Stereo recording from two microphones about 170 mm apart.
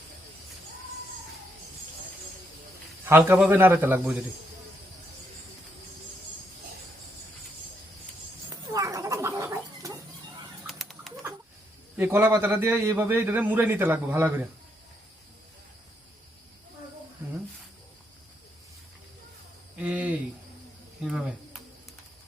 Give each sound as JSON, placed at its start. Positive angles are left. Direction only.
{"t": 3.1, "sound": "a man's voice", "side_deg": -10}
{"t": 8.4, "sound": "cat", "side_deg": -20}
{"t": 10.7, "sound": "bird", "side_deg": 0}
{"t": 11.9, "sound": "a man's voice", "side_deg": -15}
{"t": 19.8, "sound": "cricket", "side_deg": -5}
{"t": 21.0, "sound": "a sound", "side_deg": -5}